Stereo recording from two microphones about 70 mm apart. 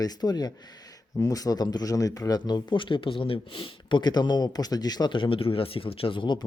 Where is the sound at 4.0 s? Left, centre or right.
Left.